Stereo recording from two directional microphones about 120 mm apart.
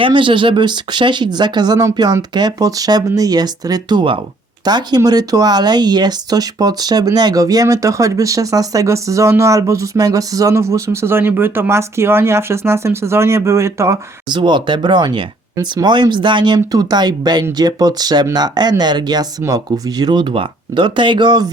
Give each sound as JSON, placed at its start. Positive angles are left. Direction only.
{"t": 0.0, "sound": "speech", "side_deg": -45}
{"t": 14.3, "sound": "speech", "side_deg": -40}